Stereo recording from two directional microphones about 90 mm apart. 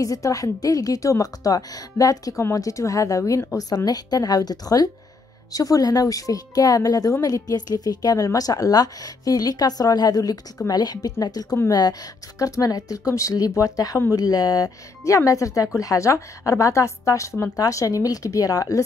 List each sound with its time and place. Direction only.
0.0 s a woman's voice: 40° left (ahead or behind)